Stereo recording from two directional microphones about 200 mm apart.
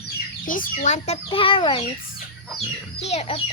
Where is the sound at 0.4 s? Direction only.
45° left (ahead or behind).